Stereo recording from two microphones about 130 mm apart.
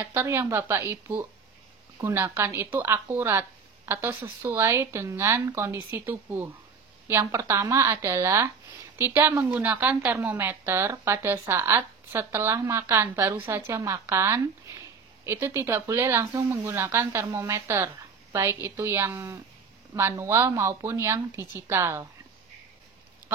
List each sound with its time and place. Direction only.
0.0 s a woman's voice: 20° right (ahead or behind)